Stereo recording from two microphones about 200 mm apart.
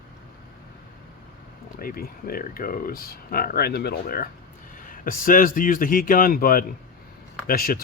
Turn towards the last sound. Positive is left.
turn(degrees=45)  # may be behind; listen again after turning